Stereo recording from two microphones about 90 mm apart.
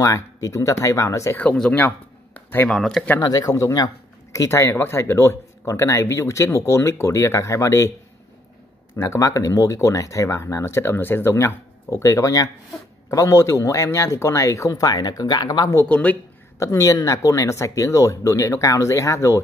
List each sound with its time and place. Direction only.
0.0 s speech: 35° left (ahead or behind)
1.4 s speech: 15° left (ahead or behind)
1.8 s a sound: 20° left (ahead or behind)
2.7 s speech: 5° left (ahead or behind)
3.2 s speech: 45° left (ahead or behind)
8.9 s speech: 30° left (ahead or behind); by 15.7 s 50° left (ahead or behind)
15.9 s speech: 15° left (ahead or behind)
16.5 s speech: 35° left (ahead or behind)